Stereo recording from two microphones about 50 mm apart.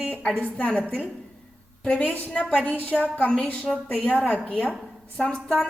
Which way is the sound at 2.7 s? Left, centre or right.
Right.